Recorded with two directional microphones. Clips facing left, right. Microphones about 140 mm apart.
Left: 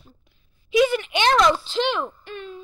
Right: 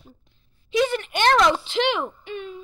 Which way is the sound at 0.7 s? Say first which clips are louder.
Left 3 dB; 10° left (ahead or behind).